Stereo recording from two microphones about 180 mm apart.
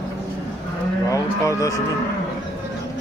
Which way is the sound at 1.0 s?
20° left (ahead or behind).